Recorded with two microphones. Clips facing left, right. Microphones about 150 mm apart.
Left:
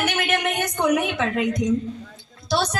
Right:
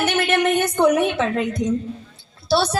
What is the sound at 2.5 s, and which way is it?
Speech, 30° right (ahead or behind).